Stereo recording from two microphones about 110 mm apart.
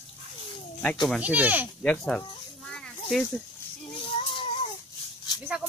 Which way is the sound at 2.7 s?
5° left (ahead or behind).